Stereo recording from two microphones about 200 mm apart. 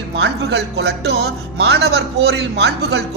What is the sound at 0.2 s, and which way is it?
Speech, 55° right (ahead or behind).